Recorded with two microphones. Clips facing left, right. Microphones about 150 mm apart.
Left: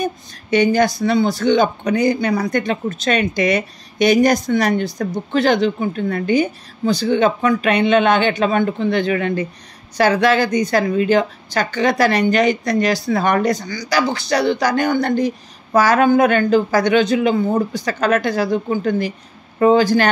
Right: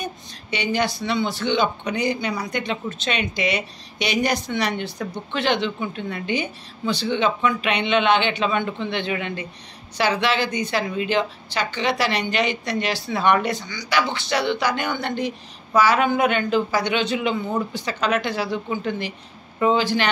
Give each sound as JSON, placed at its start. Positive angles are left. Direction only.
{"t": 0.0, "sound": "speech", "side_deg": 45}